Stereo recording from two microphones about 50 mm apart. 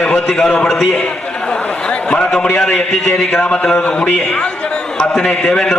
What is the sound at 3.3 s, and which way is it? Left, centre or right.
Speech, centre.